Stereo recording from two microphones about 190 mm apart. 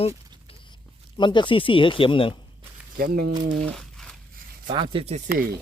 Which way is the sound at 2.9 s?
50° right (ahead or behind).